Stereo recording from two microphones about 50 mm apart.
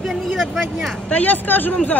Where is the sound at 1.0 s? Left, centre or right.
Left.